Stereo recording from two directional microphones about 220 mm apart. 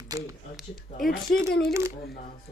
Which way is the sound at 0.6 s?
Centre (ahead or behind).